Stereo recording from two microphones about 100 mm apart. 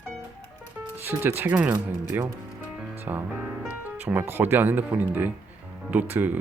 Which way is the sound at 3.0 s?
20° right (ahead or behind).